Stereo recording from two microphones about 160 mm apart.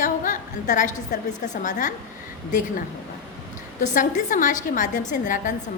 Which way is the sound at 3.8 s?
55° left (ahead or behind).